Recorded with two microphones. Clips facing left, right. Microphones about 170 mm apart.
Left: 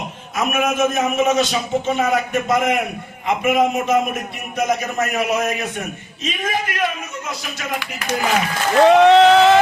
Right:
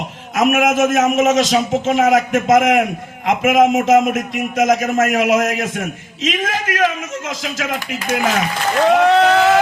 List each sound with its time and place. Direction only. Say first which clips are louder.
0.3 s a man's voice: right 5 dB; 80° right
8.9 s speech: left 2 dB; centre (ahead or behind)